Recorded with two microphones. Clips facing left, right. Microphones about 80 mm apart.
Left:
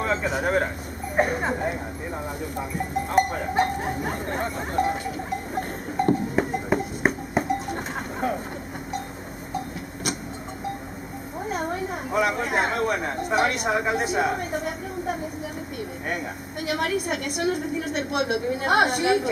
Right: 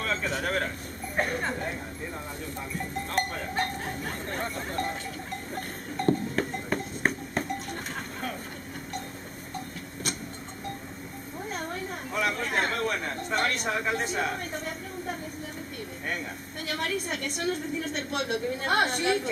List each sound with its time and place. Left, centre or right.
0.0 s a woman's voice: centre
3.4 s a sound: centre
7.7 s cowbell: left
11.3 s a woman's voice: centre
16.6 s a woman's voice: centre